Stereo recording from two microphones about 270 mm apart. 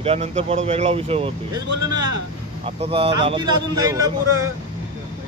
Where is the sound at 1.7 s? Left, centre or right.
Right.